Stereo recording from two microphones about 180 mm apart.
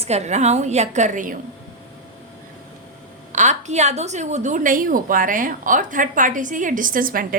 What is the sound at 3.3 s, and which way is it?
A woman's voice, 40° right (ahead or behind).